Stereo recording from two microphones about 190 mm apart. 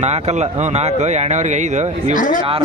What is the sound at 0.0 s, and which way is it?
Speech, 35° right (ahead or behind).